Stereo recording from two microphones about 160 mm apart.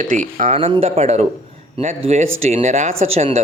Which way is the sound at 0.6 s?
40° right (ahead or behind).